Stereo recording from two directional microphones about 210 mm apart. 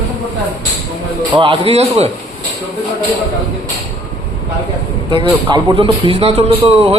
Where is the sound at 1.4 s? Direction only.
25° right (ahead or behind).